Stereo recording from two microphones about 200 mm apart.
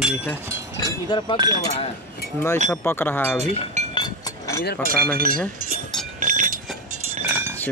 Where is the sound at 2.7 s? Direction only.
10° left (ahead or behind).